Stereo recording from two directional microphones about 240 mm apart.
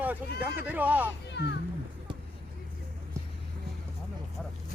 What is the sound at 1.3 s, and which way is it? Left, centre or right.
Children playing, left.